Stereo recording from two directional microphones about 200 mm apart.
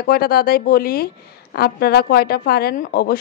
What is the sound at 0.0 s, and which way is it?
Speech, 50° left (ahead or behind).